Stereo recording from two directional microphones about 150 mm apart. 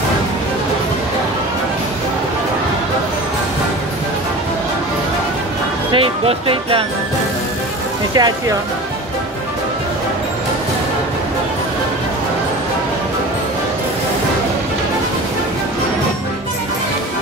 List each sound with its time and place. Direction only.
5.9 s speech: 35° right (ahead or behind)
8.1 s speech: 25° right (ahead or behind)